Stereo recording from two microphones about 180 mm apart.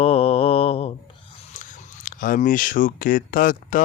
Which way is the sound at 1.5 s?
45° left (ahead or behind).